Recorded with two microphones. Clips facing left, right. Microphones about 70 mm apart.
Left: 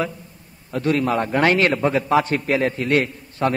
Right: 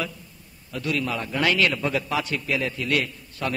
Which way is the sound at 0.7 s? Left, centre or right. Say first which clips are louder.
Left 7 dB; left.